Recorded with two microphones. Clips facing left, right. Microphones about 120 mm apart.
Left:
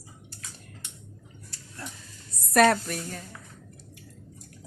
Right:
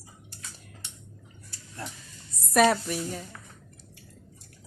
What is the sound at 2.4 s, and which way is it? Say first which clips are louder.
Speech: left 1 dB; centre (ahead or behind).